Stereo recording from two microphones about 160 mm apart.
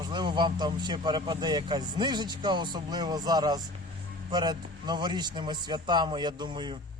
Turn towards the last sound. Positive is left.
turn(degrees=-30)  # may be behind; listen again after turning